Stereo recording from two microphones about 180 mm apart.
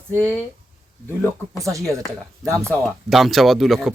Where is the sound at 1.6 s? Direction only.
Centre (ahead or behind).